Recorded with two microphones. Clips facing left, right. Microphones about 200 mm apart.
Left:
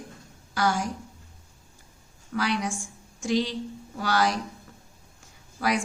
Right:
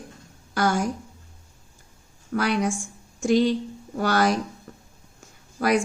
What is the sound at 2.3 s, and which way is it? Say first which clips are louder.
A woman's voice: right 4 dB; 50° right (ahead or behind).